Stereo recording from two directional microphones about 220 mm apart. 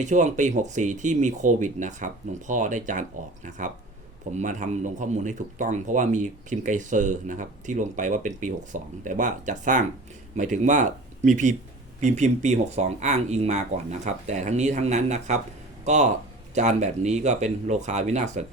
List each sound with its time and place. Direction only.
0.0 s speech: 35° right (ahead or behind)
4.4 s speech: 35° right (ahead or behind)